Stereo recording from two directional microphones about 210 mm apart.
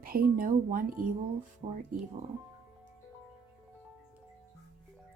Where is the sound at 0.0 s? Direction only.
45° right (ahead or behind).